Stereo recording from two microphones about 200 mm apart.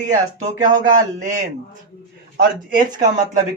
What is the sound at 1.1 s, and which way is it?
Speech, 35° right (ahead or behind).